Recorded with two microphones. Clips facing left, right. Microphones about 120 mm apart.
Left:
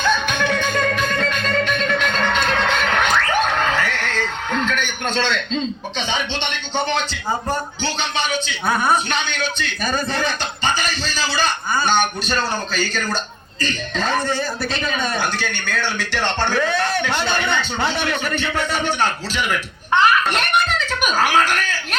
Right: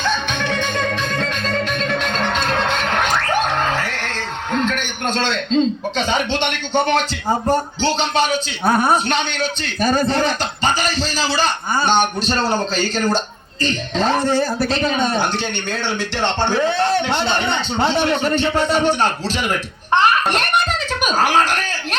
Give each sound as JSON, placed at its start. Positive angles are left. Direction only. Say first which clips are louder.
{"t": 0.0, "sound": "music", "louder": "left 2 dB", "side_deg": 0}
{"t": 1.2, "sound": "music", "louder": "left 1 dB", "side_deg": -35}
{"t": 5.1, "sound": "a man's voice", "louder": "right 5 dB", "side_deg": -40}
{"t": 7.8, "sound": "a man's voice", "louder": "right 6 dB", "side_deg": -35}